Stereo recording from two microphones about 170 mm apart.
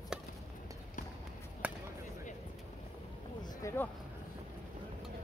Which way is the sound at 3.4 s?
25° left (ahead or behind).